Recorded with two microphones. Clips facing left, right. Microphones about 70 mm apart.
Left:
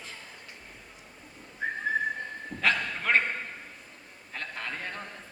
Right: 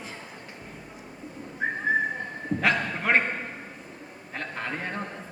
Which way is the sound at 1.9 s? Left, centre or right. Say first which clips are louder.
Right 5 dB; centre.